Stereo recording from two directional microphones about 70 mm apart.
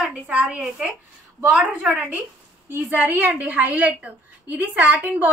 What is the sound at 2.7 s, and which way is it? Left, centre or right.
A woman's voice, right.